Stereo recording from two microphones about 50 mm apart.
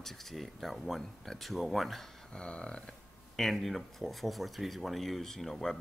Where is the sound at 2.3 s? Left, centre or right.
Left.